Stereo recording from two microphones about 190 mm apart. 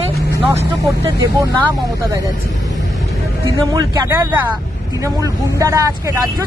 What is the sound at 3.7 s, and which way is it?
Speech, 20° right (ahead or behind).